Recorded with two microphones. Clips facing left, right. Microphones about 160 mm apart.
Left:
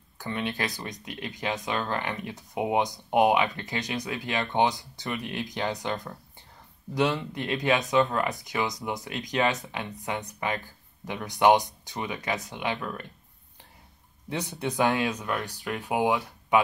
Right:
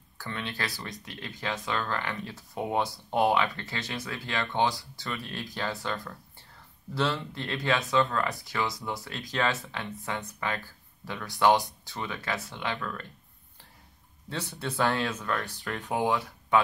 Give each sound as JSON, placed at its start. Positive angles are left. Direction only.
{"t": 0.2, "sound": "speech", "side_deg": 20}
{"t": 14.3, "sound": "speech", "side_deg": 15}